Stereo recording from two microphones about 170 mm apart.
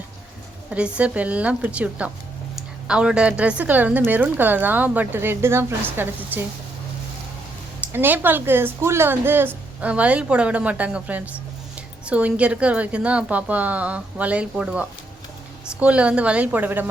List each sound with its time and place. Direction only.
0.7 s a woman's voice: 5° right (ahead or behind)
7.9 s a woman's voice: 10° right (ahead or behind)